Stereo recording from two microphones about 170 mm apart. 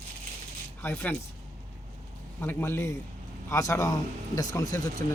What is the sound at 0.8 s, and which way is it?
Speech, 10° left (ahead or behind).